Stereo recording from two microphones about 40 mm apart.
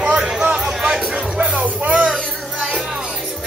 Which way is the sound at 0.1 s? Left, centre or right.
Centre.